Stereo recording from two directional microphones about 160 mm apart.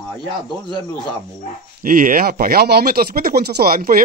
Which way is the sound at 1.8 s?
60° right (ahead or behind).